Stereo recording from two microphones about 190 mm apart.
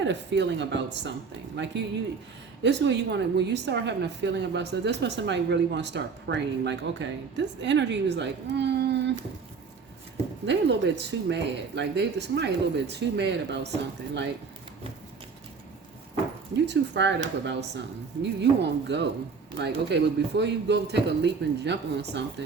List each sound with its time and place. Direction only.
0.0 s a woman's voice: 70° right (ahead or behind)
10.4 s a woman's voice: 65° right (ahead or behind)
16.6 s a woman's voice: 65° right (ahead or behind)